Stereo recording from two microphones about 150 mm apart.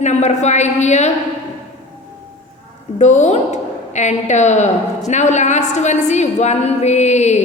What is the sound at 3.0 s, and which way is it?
A woman's voice, 50° left (ahead or behind).